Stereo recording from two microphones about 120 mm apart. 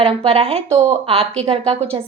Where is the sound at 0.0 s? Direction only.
50° right (ahead or behind).